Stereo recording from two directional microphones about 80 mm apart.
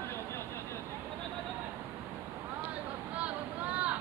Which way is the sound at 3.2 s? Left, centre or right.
Centre.